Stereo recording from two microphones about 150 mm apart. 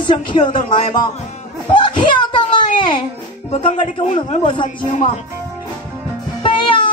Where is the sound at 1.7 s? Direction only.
30° left (ahead or behind).